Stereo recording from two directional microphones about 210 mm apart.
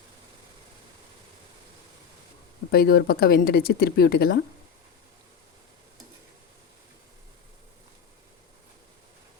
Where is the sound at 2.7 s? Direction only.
45° left (ahead or behind).